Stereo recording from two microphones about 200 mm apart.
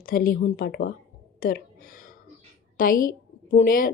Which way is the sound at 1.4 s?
45° left (ahead or behind).